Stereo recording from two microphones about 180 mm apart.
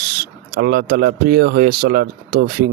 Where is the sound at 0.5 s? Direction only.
60° right (ahead or behind).